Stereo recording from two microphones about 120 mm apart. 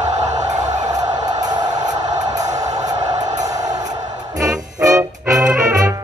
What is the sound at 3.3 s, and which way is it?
Music, 85° right.